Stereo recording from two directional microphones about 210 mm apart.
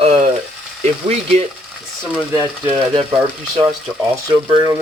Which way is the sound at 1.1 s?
30° right (ahead or behind).